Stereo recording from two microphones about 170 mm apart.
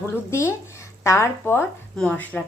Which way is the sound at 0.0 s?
15° left (ahead or behind).